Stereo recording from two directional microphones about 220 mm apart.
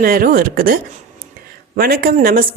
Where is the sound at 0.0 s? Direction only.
40° right (ahead or behind).